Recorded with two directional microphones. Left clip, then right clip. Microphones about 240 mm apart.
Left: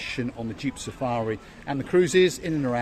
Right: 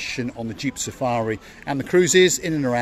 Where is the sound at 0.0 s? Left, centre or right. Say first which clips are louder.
Right 3 dB; right.